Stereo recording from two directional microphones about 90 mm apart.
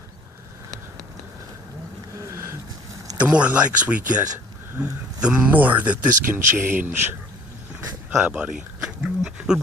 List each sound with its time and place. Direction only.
2.1 s a sound: 35° right (ahead or behind)
3.2 s speech: 15° right (ahead or behind)
8.2 s speech: 10° right (ahead or behind)